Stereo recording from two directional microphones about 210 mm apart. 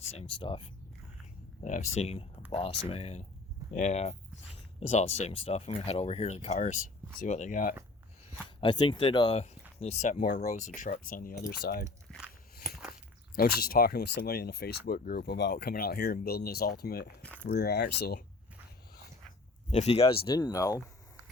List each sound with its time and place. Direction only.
0.1 s speech: 25° left (ahead or behind)
8.6 s speech: 20° left (ahead or behind); by 11.9 s 45° left (ahead or behind)
12.1 s walk: centre (ahead or behind)
13.3 s speech: 45° left (ahead or behind)
17.2 s biting: 5° left (ahead or behind)
17.5 s speech: 50° left (ahead or behind)
19.7 s speech: 30° left (ahead or behind)